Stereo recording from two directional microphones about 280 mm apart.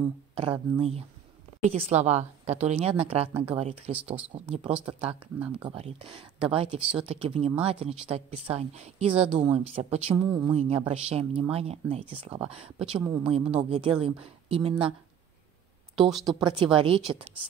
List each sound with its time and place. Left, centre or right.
0.3 s speech: centre
5.0 s speech: centre
5.7 s speech: right
16.3 s speech: centre